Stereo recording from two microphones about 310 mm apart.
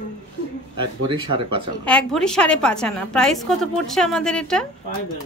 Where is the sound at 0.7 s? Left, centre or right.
Centre.